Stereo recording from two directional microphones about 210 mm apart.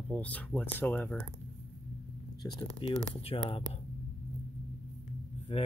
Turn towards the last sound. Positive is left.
turn(degrees=25)  # may be behind; listen again after turning